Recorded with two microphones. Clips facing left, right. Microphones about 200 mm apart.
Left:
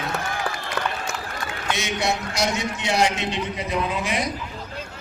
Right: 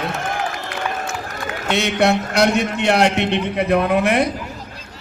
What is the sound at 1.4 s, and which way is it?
A man's voice, 60° right (ahead or behind).